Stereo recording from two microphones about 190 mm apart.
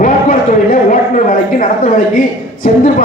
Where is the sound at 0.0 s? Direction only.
45° left (ahead or behind).